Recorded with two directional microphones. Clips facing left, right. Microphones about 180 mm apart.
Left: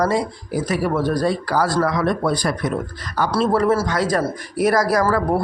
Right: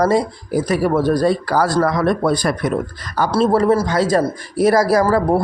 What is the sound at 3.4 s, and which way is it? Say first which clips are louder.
A man's voice: right 3 dB; 30° right (ahead or behind).